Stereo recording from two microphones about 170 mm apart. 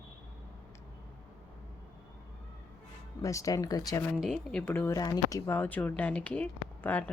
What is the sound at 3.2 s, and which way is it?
Speech, 20° left (ahead or behind).